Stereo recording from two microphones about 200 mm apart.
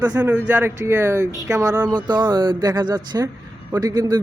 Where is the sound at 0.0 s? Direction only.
15° right (ahead or behind).